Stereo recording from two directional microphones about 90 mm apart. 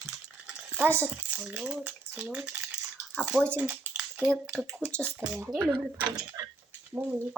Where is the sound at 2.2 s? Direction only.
10° right (ahead or behind).